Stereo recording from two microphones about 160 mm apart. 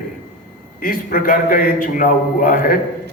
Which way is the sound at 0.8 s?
60° left (ahead or behind).